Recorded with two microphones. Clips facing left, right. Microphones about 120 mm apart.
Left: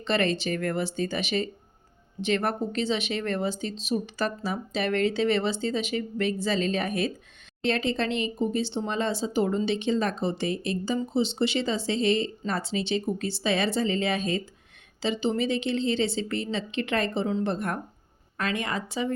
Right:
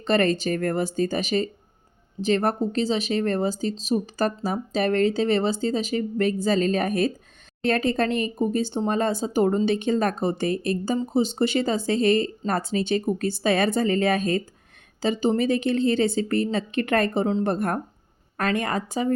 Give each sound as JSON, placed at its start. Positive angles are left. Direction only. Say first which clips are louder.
{"t": 0.0, "sound": "speech", "louder": "right 4 dB", "side_deg": -45}